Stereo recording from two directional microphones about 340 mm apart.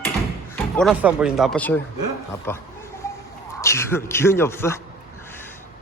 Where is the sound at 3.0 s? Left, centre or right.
Centre.